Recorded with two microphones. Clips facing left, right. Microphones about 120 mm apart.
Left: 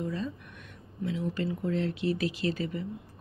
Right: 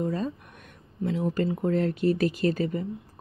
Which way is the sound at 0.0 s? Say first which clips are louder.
Right 5 dB; 45° right (ahead or behind).